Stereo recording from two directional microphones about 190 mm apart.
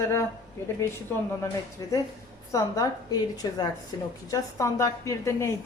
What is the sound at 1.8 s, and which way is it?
A woman's voice, 15° left (ahead or behind).